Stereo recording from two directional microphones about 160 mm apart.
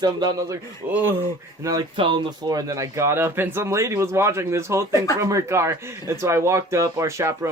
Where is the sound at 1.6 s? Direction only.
30° right (ahead or behind).